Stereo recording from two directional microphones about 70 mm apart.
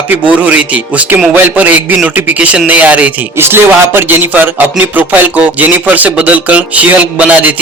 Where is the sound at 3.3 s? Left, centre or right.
Right.